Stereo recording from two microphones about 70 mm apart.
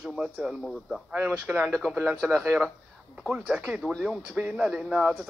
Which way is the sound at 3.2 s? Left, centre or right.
Centre.